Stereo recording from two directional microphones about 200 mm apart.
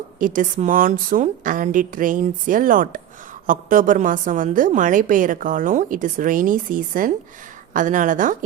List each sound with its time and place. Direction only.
0.2 s a woman's voice: 40° right (ahead or behind)